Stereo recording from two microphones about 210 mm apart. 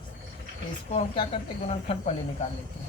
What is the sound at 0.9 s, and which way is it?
Speech, 25° left (ahead or behind).